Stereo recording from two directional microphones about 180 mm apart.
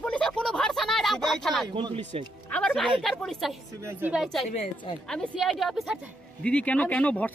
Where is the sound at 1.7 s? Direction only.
30° right (ahead or behind).